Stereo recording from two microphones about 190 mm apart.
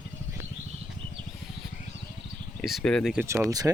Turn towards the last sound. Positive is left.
turn(degrees=-10)  # may be behind; listen again after turning